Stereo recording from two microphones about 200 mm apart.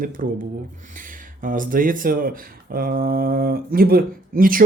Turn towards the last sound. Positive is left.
turn(degrees=-45)  # may be behind; listen again after turning